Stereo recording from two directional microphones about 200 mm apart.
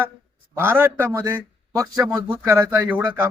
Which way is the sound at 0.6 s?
10° right (ahead or behind).